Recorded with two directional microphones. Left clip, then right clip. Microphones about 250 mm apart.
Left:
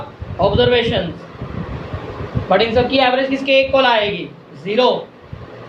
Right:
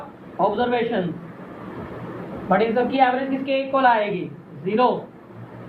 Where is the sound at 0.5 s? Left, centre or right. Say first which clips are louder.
Left 8 dB; left.